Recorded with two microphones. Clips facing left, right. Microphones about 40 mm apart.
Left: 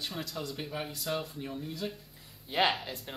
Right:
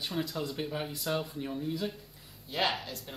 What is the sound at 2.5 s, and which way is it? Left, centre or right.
Speech, left.